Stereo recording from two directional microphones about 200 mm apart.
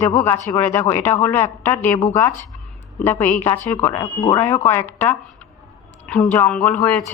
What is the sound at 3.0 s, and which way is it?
Speech, 10° left (ahead or behind).